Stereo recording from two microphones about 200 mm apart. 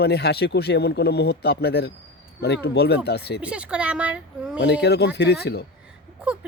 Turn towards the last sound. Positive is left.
turn(degrees=-5)  # may be behind; listen again after turning